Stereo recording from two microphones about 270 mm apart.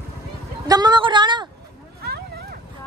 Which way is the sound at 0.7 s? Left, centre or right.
Centre.